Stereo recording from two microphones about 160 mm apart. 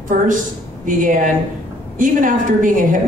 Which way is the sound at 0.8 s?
55° right (ahead or behind).